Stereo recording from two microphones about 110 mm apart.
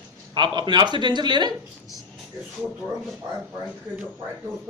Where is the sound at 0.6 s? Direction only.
45° right (ahead or behind).